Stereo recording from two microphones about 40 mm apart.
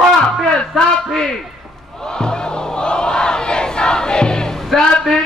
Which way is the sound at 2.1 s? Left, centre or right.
Centre.